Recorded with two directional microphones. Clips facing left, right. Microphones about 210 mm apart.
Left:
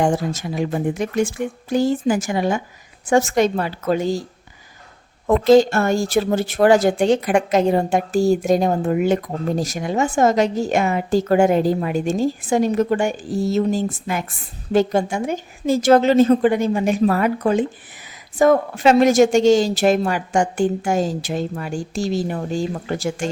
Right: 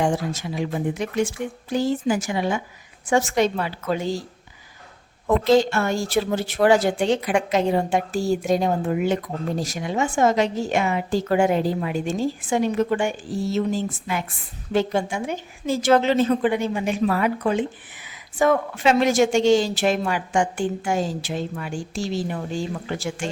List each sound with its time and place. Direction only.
0.0 s speech: 50° left (ahead or behind)
5.5 s speech: 45° left (ahead or behind)